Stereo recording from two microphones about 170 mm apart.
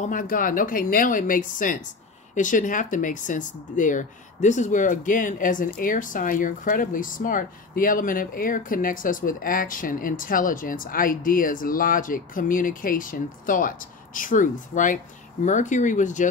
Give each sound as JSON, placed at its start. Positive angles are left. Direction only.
{"t": 0.0, "sound": "speech", "side_deg": 50}